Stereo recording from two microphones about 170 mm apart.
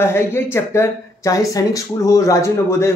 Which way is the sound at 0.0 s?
15° left (ahead or behind).